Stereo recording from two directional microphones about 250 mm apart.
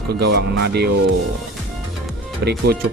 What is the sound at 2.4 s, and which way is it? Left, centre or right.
Speech, right.